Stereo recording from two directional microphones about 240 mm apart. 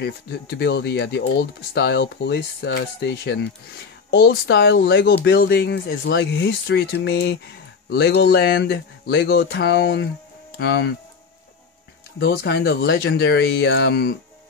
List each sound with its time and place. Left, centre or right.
0.0 s speech: left
12.2 s speech: left